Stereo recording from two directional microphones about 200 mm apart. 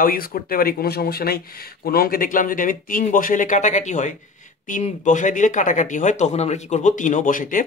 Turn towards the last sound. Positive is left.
turn(degrees=40)  # may be behind; listen again after turning